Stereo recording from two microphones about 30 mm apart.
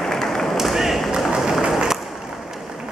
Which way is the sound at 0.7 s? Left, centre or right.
Centre.